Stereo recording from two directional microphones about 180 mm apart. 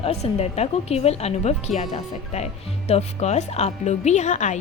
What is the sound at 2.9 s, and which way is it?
A woman's voice, 35° left (ahead or behind).